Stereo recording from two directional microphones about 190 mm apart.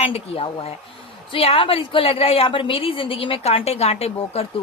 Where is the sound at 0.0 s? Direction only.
30° left (ahead or behind).